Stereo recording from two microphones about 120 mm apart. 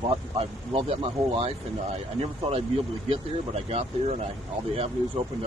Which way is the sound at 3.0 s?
60° right (ahead or behind).